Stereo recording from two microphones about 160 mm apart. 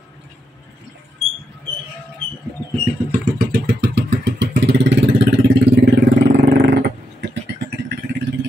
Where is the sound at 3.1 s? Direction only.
60° right (ahead or behind); by 4.8 s 90° right.